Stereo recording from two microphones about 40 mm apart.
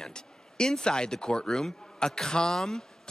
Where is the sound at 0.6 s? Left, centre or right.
Centre.